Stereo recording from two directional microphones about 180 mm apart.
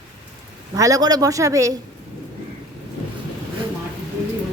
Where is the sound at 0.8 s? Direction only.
20° right (ahead or behind).